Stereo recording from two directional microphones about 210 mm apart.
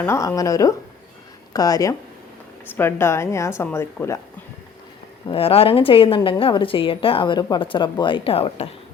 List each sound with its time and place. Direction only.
0.0 s speech: 10° left (ahead or behind)
5.3 s a woman's voice: 25° left (ahead or behind)